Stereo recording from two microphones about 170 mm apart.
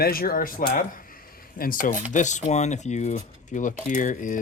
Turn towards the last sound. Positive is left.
turn(degrees=50)  # may be behind; listen again after turning